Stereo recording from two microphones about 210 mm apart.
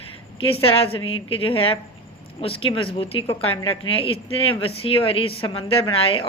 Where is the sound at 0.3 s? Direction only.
25° left (ahead or behind).